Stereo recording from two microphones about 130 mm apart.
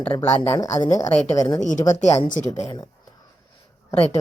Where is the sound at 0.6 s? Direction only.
65° left (ahead or behind).